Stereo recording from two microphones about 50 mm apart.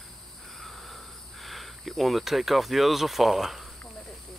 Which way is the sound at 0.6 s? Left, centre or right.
Centre.